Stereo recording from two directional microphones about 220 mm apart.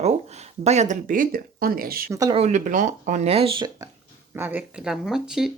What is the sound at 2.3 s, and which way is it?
Speech, 30° right (ahead or behind).